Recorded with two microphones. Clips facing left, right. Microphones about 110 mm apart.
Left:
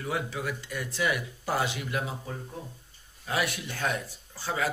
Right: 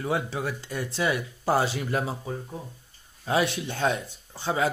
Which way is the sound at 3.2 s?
25° right (ahead or behind).